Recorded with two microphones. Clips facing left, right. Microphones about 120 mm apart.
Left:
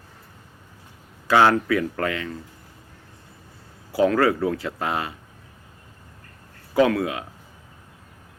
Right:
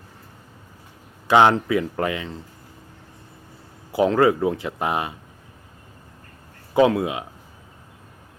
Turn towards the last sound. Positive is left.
turn(degrees=-20)  # may be behind; listen again after turning